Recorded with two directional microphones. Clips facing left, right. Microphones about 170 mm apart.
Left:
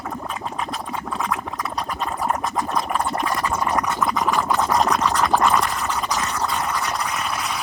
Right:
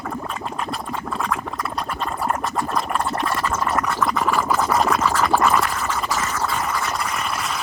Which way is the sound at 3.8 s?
Centre (ahead or behind).